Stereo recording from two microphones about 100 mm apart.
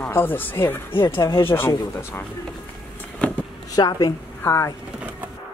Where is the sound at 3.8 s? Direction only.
45° left (ahead or behind).